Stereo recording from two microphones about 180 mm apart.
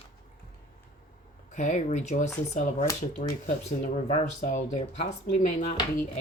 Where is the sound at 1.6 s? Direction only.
45° left (ahead or behind).